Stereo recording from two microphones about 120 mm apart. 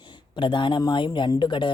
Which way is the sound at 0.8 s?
40° left (ahead or behind).